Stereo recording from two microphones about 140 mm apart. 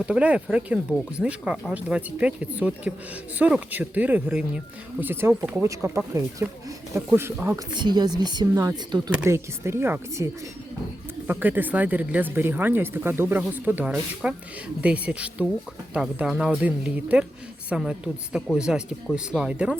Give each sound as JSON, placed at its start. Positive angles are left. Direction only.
{"t": 0.0, "sound": "speech", "side_deg": -10}
{"t": 7.7, "sound": "speech", "side_deg": -30}
{"t": 9.2, "sound": "speech", "side_deg": -20}
{"t": 11.3, "sound": "speech", "side_deg": -15}